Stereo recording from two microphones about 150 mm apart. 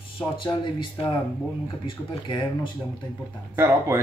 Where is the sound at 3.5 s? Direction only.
20° right (ahead or behind).